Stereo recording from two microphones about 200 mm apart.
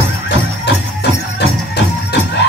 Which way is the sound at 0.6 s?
55° left (ahead or behind).